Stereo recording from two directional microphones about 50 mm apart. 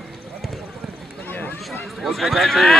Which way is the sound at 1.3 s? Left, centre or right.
Left.